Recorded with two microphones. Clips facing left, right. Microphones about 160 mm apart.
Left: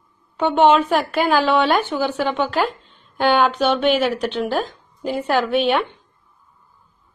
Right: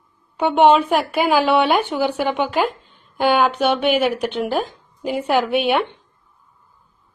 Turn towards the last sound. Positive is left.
turn(degrees=-15)  # may be behind; listen again after turning